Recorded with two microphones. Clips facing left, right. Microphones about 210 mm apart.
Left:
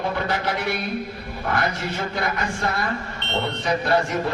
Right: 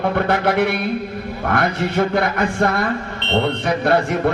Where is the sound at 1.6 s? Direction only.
60° right (ahead or behind).